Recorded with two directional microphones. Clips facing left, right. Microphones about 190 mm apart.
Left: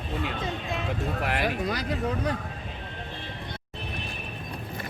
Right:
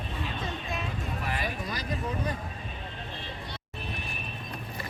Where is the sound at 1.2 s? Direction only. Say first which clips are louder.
Left 7 dB; 70° left (ahead or behind).